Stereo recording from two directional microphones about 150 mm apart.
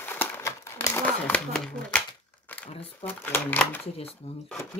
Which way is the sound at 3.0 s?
10° left (ahead or behind).